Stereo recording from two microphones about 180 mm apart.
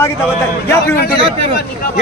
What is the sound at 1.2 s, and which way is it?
Speech, 30° right (ahead or behind).